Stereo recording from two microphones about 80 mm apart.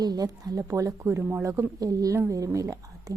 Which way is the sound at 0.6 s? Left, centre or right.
Right.